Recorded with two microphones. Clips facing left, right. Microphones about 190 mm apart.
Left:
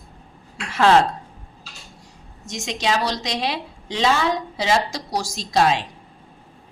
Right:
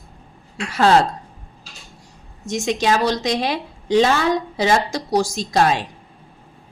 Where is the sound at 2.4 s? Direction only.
55° right (ahead or behind).